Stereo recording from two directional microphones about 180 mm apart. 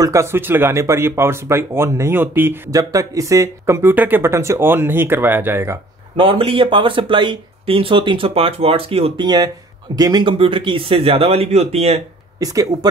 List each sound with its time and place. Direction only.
0.0 s speech: 15° right (ahead or behind)
6.1 s speech: 30° right (ahead or behind)
12.4 s speech: 20° right (ahead or behind)